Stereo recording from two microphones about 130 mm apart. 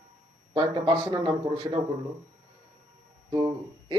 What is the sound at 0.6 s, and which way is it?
Speech, 40° right (ahead or behind).